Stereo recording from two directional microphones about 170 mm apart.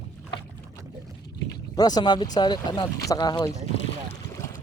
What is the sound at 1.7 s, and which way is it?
Speech, 25° left (ahead or behind).